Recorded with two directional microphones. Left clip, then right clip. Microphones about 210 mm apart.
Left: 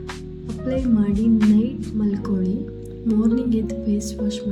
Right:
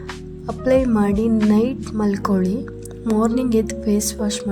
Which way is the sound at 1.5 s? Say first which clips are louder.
Right 4 dB; 50° right (ahead or behind).